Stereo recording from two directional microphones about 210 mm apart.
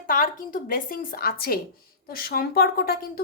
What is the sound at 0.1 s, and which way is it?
A woman's voice, 40° left (ahead or behind).